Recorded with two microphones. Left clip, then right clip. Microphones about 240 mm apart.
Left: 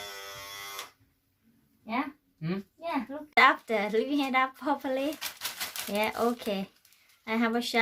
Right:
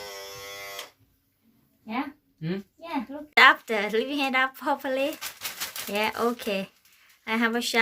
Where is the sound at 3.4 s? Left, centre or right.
Centre.